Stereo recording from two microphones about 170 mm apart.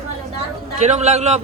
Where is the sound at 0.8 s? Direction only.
40° right (ahead or behind).